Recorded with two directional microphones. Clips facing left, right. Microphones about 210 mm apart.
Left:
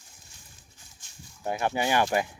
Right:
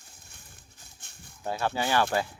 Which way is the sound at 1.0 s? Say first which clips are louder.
Left 3 dB; 60° right (ahead or behind).